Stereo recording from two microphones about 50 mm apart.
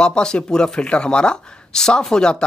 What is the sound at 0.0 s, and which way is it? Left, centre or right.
Speech, centre.